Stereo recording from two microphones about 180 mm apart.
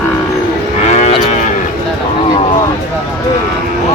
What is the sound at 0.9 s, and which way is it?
Cattle, 35° left (ahead or behind).